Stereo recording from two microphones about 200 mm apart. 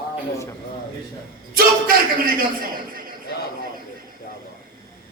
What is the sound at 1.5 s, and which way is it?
A man's voice, 45° right (ahead or behind).